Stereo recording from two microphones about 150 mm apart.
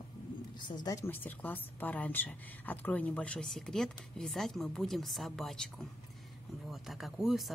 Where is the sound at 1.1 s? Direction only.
10° left (ahead or behind).